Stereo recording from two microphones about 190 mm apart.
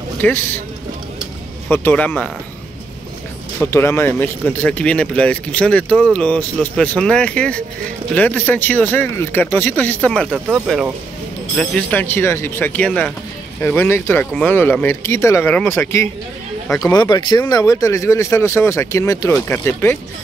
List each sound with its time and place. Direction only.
0.2 s speech: 10° left (ahead or behind)
1.7 s speech: 10° left (ahead or behind)
3.7 s speech: 15° left (ahead or behind)